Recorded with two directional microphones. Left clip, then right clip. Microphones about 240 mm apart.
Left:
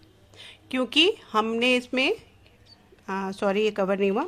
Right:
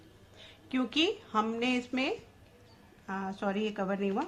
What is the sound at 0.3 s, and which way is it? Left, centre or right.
Speech, left.